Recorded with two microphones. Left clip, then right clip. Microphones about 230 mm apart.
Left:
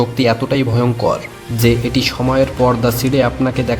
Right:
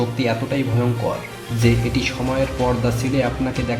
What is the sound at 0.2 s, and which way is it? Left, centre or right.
Speech, left.